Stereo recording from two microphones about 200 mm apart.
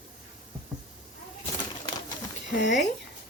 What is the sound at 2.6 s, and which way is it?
Speech, 60° left (ahead or behind).